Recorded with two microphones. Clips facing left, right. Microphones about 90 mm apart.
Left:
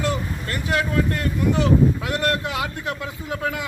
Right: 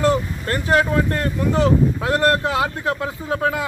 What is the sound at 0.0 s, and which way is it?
Speech, 35° right (ahead or behind).